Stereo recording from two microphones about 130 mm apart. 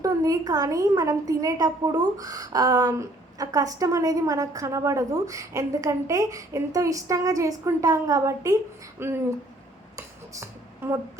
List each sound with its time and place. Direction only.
0.0 s a woman's voice: 25° right (ahead or behind)
10.8 s speech: 15° right (ahead or behind)